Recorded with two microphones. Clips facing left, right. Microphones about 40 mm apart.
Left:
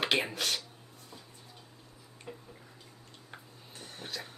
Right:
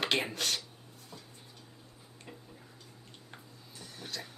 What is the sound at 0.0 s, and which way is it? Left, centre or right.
Speech, centre.